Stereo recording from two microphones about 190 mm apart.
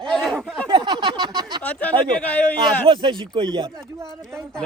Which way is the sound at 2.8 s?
25° right (ahead or behind).